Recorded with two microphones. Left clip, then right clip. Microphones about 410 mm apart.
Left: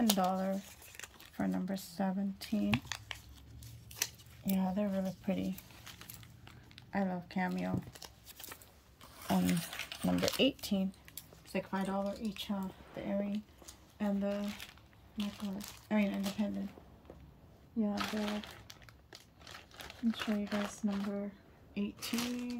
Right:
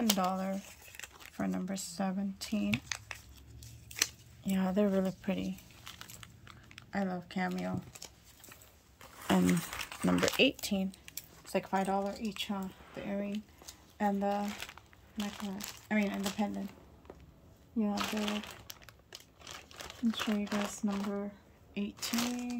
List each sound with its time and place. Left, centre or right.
0.0 s speech: centre
4.5 s speech: centre
5.9 s crumpling: centre
9.3 s speech: centre
13.3 s a sound: centre
15.1 s speech: centre
17.7 s speech: right